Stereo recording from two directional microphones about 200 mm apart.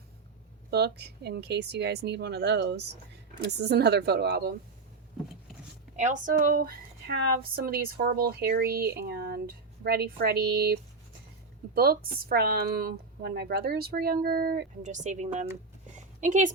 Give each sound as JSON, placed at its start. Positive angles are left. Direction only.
{"t": 0.7, "sound": "speech", "side_deg": -55}
{"t": 6.0, "sound": "a woman's voice", "side_deg": -40}